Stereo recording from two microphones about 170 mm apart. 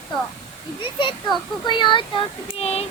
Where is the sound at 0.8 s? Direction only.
30° left (ahead or behind).